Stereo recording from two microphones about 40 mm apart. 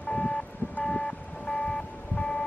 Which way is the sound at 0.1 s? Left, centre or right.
Left.